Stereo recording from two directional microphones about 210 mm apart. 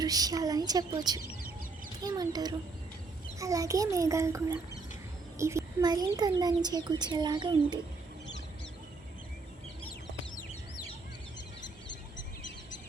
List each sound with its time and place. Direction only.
0.0 s a child's voice: 15° right (ahead or behind)